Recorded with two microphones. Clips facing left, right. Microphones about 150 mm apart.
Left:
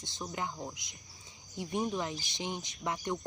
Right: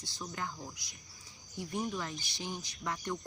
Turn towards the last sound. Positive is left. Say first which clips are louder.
# left 3 dB
turn(degrees=20)  # may be behind; listen again after turning